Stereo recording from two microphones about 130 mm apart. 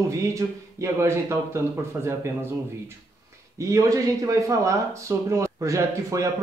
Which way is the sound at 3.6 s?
25° right (ahead or behind).